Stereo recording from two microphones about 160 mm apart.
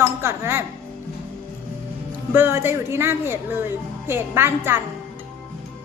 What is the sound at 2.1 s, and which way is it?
Speech, 15° right (ahead or behind).